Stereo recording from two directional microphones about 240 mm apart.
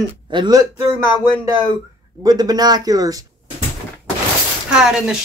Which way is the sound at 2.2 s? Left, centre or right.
Centre.